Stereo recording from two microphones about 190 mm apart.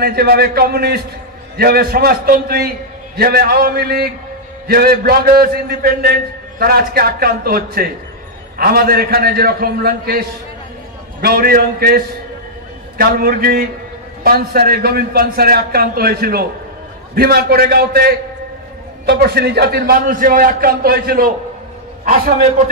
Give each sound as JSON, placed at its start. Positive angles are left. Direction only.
{"t": 0.0, "sound": "a man's voice", "side_deg": -55}